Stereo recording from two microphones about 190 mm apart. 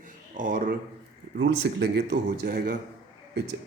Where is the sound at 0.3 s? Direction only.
45° right (ahead or behind).